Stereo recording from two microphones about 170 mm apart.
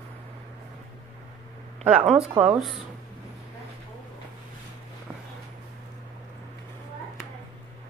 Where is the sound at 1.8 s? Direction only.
5° right (ahead or behind).